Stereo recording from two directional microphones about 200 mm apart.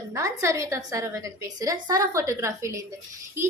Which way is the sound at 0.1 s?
15° right (ahead or behind).